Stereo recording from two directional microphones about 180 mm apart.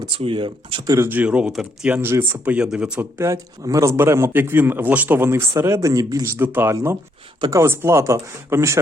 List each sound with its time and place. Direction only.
0.1 s speech: 30° right (ahead or behind)
0.9 s speech: 10° right (ahead or behind)